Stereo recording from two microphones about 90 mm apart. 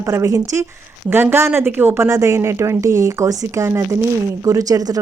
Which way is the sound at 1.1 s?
25° right (ahead or behind).